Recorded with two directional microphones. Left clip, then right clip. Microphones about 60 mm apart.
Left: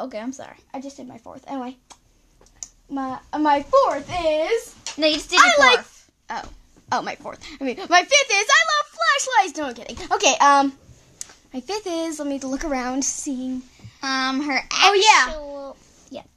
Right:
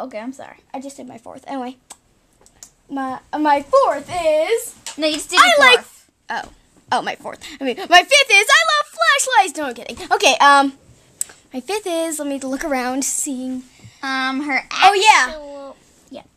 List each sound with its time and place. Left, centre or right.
0.0 s a woman's voice: left
0.7 s speech: right
2.9 s a child's voice: right
6.2 s a sound: right
7.2 s a child's voice: right
13.3 s a child's voice: right
13.9 s a woman's voice: left
15.0 s speech: right